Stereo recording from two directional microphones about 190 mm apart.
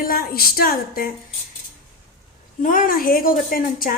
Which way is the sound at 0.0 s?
50° left (ahead or behind).